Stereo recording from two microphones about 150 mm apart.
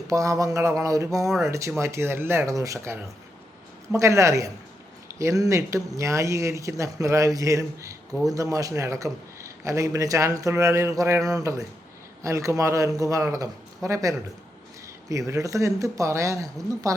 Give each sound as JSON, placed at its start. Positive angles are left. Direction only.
{"t": 0.1, "sound": "a man's voice", "side_deg": -20}
{"t": 15.3, "sound": "a man's voice", "side_deg": -20}